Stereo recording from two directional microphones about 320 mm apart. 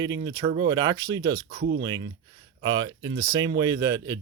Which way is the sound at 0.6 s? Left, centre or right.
Centre.